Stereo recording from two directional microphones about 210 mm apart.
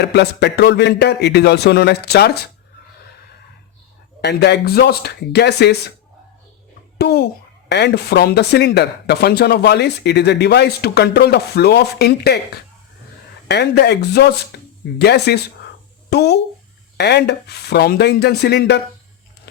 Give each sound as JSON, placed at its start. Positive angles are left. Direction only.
{"t": 0.0, "sound": "speech", "side_deg": 55}
{"t": 4.2, "sound": "speech", "side_deg": 50}
{"t": 7.0, "sound": "speech", "side_deg": 50}
{"t": 13.5, "sound": "speech", "side_deg": 50}